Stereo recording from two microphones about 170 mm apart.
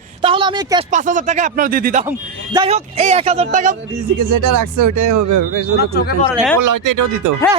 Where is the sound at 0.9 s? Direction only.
45° right (ahead or behind).